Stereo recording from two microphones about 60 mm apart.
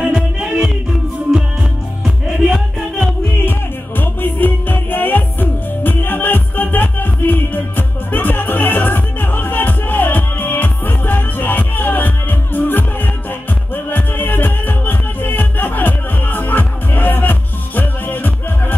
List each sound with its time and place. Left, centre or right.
0.1 s music: centre
2.0 s music: centre
3.4 s music: left